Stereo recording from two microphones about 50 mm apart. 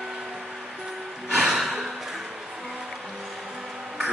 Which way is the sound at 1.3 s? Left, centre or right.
Centre.